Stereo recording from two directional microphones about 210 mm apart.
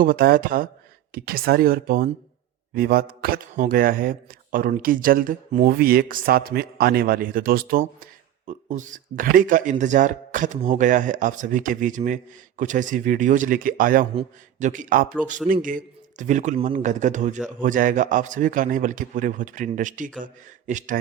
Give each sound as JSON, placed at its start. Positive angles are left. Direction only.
{"t": 0.0, "sound": "speech", "side_deg": -45}